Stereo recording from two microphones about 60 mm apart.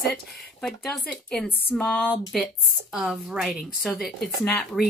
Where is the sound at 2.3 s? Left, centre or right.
Centre.